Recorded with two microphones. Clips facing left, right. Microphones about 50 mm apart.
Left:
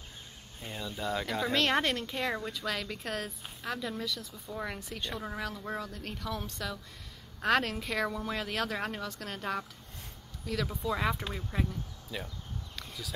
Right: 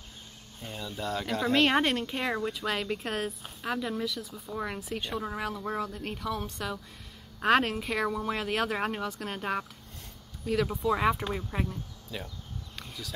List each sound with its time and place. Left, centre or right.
0.6 s speech: centre
1.5 s speech: centre
12.1 s speech: centre